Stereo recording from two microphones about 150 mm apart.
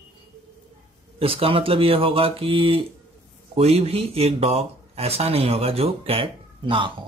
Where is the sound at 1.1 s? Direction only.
40° right (ahead or behind).